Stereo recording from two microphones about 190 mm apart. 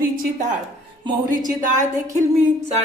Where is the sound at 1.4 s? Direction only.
40° right (ahead or behind).